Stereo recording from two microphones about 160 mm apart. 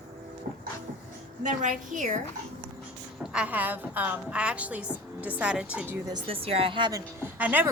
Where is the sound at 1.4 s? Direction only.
50° right (ahead or behind).